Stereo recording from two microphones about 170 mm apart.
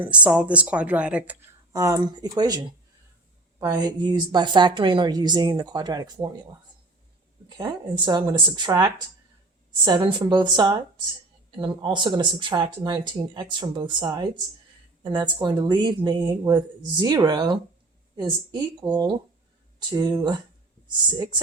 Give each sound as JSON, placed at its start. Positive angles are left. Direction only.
{"t": 0.0, "sound": "speech", "side_deg": -10}
{"t": 1.7, "sound": "speech", "side_deg": -20}
{"t": 3.6, "sound": "speech", "side_deg": -20}
{"t": 7.5, "sound": "speech", "side_deg": -25}